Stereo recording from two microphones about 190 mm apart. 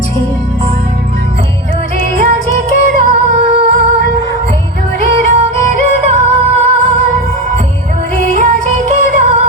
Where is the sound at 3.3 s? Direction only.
40° right (ahead or behind).